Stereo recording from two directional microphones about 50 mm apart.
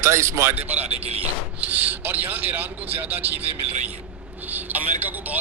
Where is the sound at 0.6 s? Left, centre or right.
Right.